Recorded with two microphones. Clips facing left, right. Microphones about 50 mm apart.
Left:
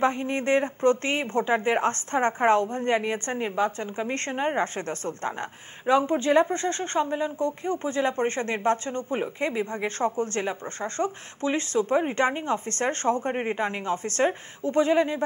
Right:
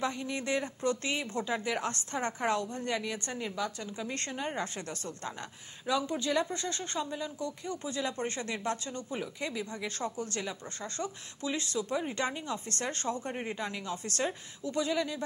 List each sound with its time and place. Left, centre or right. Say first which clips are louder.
0.0 s a woman's voice: left 9 dB; left